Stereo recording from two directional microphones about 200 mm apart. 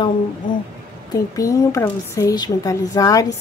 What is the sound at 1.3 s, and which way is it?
A woman's voice, 15° left (ahead or behind).